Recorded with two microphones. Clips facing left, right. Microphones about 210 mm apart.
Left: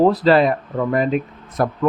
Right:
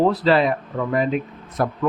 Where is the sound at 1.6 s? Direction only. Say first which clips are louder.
Left 2 dB; 50° left (ahead or behind).